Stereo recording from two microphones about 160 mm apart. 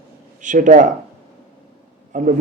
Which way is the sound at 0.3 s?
55° right (ahead or behind).